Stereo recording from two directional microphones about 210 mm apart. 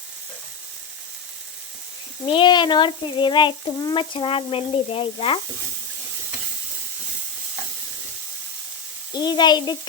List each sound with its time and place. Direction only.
2.2 s speech: 25° left (ahead or behind)
9.1 s speech: 20° left (ahead or behind)